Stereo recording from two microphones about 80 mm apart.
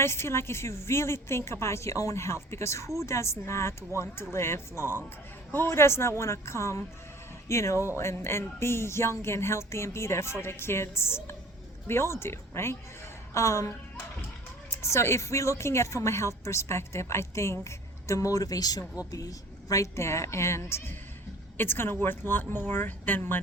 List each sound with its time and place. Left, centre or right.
0.0 s a woman's voice: left